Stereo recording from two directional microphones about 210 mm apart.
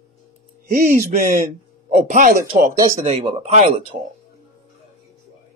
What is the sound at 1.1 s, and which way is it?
Speech, 40° right (ahead or behind).